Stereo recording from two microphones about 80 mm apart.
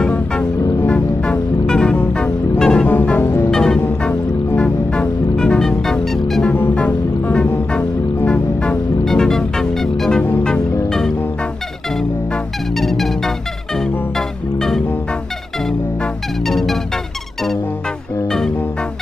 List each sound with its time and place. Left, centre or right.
0.0 s music: centre
2.9 s music: left
3.4 s music: centre
6.5 s music: left; by 11.1 s centre
12.7 s music: centre
16.0 s music: centre